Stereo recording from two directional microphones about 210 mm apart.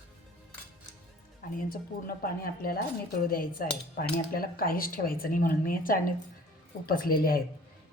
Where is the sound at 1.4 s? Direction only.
45° left (ahead or behind).